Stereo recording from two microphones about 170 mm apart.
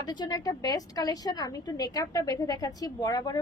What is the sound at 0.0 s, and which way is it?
A woman's voice, 25° left (ahead or behind).